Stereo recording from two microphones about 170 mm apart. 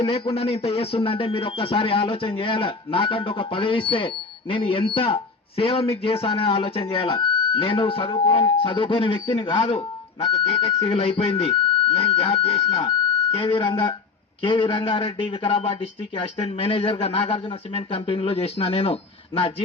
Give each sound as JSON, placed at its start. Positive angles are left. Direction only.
{"t": 0.0, "sound": "speech", "side_deg": 35}